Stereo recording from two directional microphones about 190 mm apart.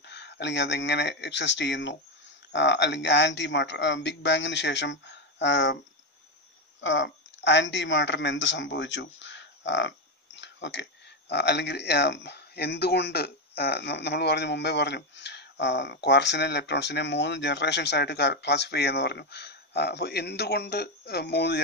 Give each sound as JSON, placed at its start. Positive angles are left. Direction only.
{"t": 0.0, "sound": "speech", "side_deg": 65}
{"t": 6.8, "sound": "speech", "side_deg": 75}